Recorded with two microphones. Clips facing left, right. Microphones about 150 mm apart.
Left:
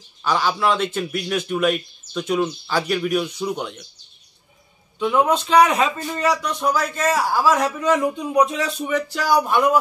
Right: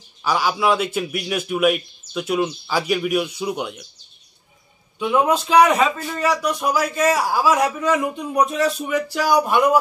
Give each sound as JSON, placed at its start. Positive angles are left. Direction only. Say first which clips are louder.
{"t": 0.2, "sound": "a man's voice", "louder": "even", "side_deg": -10}
{"t": 4.9, "sound": "a man's voice", "louder": "even", "side_deg": -5}